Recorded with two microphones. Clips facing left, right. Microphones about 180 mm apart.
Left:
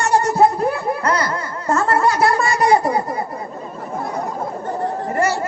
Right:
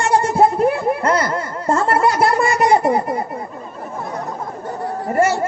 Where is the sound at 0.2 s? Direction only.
25° right (ahead or behind).